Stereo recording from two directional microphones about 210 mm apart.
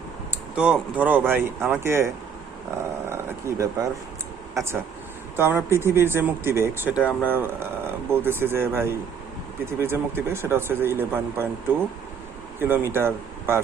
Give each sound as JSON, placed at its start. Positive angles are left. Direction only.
{"t": 0.5, "sound": "speech", "side_deg": -5}
{"t": 3.1, "sound": "speech", "side_deg": -10}
{"t": 5.4, "sound": "speech", "side_deg": -10}
{"t": 12.5, "sound": "speech", "side_deg": -10}